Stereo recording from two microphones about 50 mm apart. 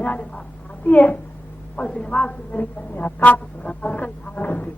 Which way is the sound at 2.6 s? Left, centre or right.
Left.